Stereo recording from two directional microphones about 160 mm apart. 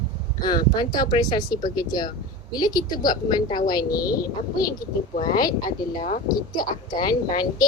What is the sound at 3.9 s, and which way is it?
Speech, 70° left (ahead or behind).